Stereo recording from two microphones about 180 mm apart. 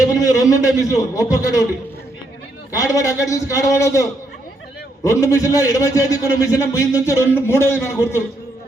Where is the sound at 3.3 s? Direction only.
15° left (ahead or behind).